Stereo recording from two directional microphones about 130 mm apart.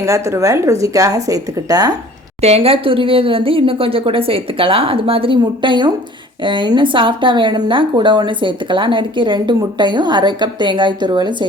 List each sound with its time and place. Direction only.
0.0 s a woman's voice: 25° right (ahead or behind)
2.4 s a woman's voice: 50° right (ahead or behind); by 11.4 s 35° right (ahead or behind)